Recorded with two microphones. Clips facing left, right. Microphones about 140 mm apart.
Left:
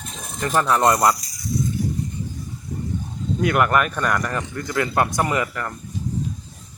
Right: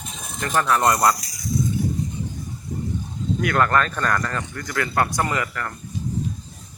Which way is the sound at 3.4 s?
20° left (ahead or behind).